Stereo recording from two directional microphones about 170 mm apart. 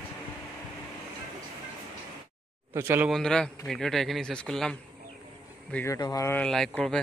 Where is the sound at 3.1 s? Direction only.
5° left (ahead or behind).